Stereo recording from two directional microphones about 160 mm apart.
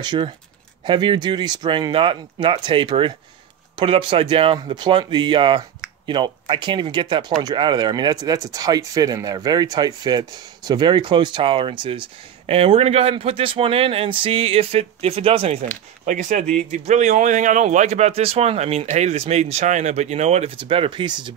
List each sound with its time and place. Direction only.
0.0 s speech: 30° right (ahead or behind)
16.1 s speech: 50° right (ahead or behind); by 21.4 s 30° right (ahead or behind)